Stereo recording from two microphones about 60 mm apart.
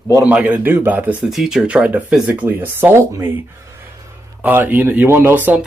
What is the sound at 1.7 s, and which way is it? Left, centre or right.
Speech, right.